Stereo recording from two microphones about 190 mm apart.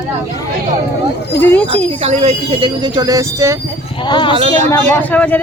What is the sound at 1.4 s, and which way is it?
Speech, 10° left (ahead or behind).